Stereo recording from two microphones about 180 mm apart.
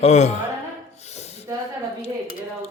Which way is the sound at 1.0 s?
40° left (ahead or behind).